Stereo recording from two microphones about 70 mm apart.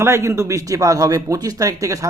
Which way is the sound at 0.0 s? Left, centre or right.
Right.